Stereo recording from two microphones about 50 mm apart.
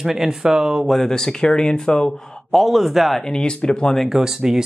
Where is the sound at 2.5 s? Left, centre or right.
Centre.